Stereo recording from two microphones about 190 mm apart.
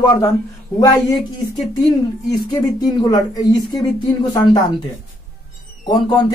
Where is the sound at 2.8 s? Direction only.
20° left (ahead or behind).